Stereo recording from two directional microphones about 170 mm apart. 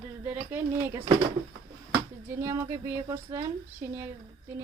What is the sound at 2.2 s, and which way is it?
A woman's voice, 15° right (ahead or behind).